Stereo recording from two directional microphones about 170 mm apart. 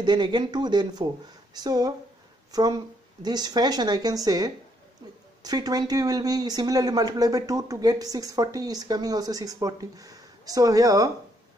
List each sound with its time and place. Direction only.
0.0 s speech: 25° right (ahead or behind)